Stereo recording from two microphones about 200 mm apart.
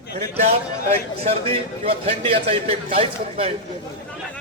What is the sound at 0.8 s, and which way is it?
Speech, 30° right (ahead or behind).